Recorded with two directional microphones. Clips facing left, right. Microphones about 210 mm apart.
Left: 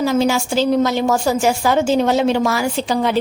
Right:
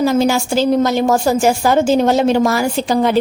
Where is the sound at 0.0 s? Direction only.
45° right (ahead or behind).